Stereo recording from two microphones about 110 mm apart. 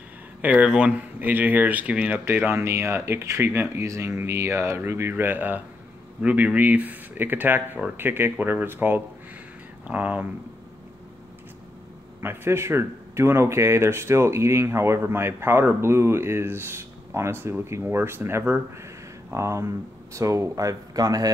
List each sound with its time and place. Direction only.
0.4 s speech: 15° right (ahead or behind)
12.2 s speech: 20° right (ahead or behind)